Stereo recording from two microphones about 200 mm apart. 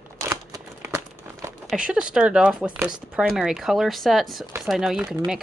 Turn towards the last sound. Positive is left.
turn(degrees=-5)  # may be behind; listen again after turning